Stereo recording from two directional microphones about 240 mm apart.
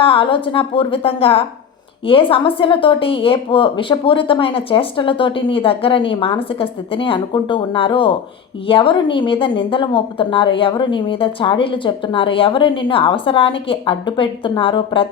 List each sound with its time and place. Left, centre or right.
0.0 s speech: left